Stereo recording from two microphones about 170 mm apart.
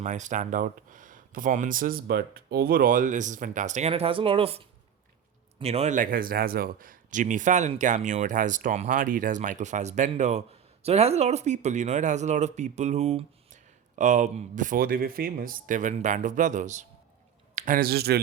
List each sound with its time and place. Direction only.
0.0 s speech: 45° right (ahead or behind)
17.5 s a sound: 40° right (ahead or behind)
17.7 s speech: 65° right (ahead or behind)